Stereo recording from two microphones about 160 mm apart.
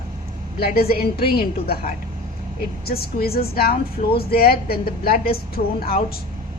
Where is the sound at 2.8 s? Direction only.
75° left (ahead or behind).